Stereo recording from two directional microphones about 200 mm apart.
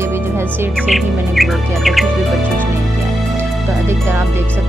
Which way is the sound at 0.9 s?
Centre (ahead or behind).